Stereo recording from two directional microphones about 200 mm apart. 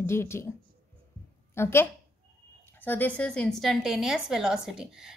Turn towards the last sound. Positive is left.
turn(degrees=-5)  # may be behind; listen again after turning